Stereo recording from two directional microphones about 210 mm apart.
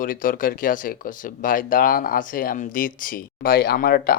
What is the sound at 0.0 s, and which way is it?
Speech, 40° left (ahead or behind).